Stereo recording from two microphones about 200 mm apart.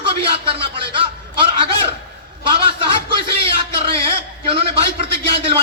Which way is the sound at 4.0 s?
30° right (ahead or behind).